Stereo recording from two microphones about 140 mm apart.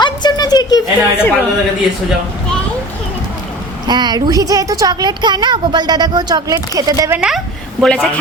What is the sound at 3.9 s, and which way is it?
A woman's voice, 30° right (ahead or behind).